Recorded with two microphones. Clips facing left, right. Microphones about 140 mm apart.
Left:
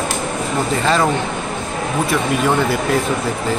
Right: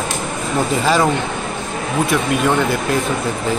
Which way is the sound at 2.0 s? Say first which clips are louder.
Even; centre (ahead or behind).